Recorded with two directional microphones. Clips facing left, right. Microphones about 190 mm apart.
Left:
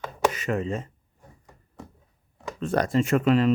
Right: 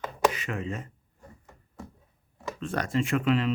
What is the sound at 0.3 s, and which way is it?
Speech, 40° left (ahead or behind).